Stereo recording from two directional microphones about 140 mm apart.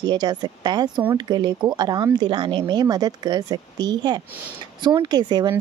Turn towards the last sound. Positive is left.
turn(degrees=-30)  # may be behind; listen again after turning